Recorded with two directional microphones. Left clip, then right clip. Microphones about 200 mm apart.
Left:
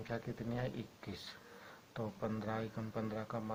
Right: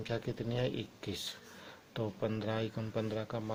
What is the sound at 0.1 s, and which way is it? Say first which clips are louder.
Speech: right 4 dB; 50° right (ahead or behind).